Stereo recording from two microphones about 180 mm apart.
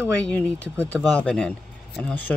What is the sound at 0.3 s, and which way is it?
A man's voice, 5° left (ahead or behind).